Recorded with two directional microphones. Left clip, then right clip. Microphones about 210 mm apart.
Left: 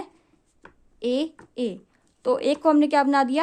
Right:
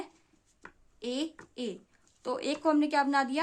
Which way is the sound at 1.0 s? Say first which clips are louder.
Left 10 dB; 35° left (ahead or behind).